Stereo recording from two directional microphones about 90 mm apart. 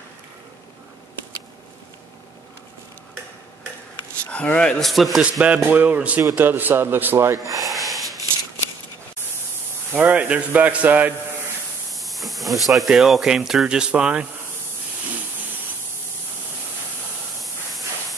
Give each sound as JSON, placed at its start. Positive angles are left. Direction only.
{"t": 4.3, "sound": "speech", "side_deg": 15}
{"t": 4.8, "sound": "speech", "side_deg": 0}
{"t": 5.7, "sound": "a man's voice", "side_deg": -15}
{"t": 7.6, "sound": "a sound", "side_deg": 0}
{"t": 9.9, "sound": "a man's voice", "side_deg": -15}
{"t": 11.9, "sound": "hiss", "side_deg": 0}
{"t": 12.6, "sound": "speech", "side_deg": 0}